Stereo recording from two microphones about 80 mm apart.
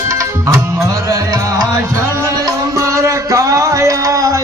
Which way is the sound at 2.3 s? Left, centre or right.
Right.